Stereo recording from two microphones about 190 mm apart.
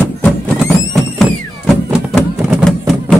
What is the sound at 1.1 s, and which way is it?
Music, centre (ahead or behind).